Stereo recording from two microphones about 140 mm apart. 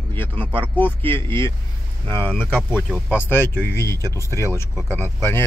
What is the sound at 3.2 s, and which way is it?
Speech, 15° left (ahead or behind).